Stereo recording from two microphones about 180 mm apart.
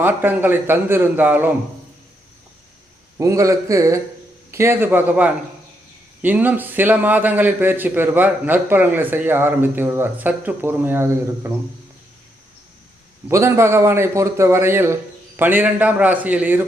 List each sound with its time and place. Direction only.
0.0 s a man's voice: 10° right (ahead or behind)
3.2 s a man's voice: 15° right (ahead or behind)
13.2 s a man's voice: 15° right (ahead or behind)